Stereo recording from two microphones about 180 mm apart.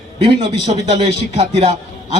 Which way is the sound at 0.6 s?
25° right (ahead or behind).